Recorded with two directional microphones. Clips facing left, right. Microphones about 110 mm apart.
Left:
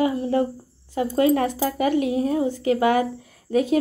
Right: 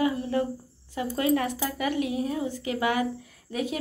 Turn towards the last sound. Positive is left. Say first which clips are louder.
# left 9 dB
turn(degrees=35)  # may be behind; listen again after turning